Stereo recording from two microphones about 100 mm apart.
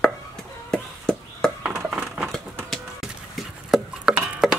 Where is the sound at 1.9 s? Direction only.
10° right (ahead or behind).